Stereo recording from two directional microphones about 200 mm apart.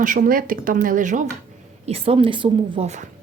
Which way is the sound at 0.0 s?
40° right (ahead or behind).